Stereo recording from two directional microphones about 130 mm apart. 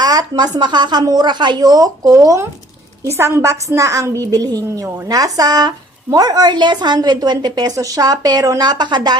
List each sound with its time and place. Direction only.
0.0 s a woman's voice: 30° right (ahead or behind)